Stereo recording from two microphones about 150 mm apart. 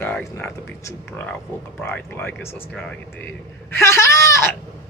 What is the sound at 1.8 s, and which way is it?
Speech, 10° left (ahead or behind).